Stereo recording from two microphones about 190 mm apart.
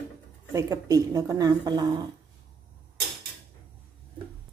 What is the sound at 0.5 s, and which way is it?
A woman's voice, 15° right (ahead or behind).